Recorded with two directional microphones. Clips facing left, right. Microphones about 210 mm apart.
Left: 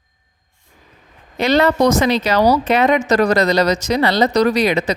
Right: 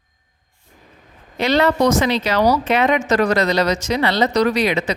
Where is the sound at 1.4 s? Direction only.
45° left (ahead or behind).